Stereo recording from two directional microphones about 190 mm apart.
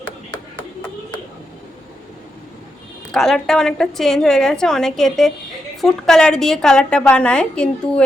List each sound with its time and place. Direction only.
3.1 s a woman's voice: 5° left (ahead or behind)